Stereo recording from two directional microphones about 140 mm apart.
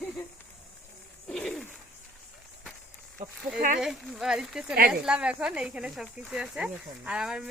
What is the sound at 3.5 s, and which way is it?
Speech, 85° right.